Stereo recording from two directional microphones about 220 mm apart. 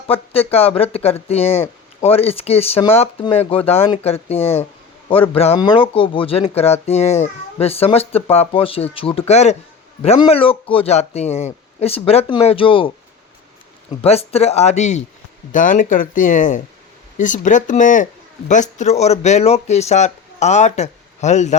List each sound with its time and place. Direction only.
0.1 s speech: 25° left (ahead or behind)
14.0 s speech: 25° left (ahead or behind)